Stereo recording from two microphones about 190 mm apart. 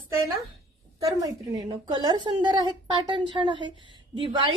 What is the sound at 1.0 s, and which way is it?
A woman's voice, 20° right (ahead or behind).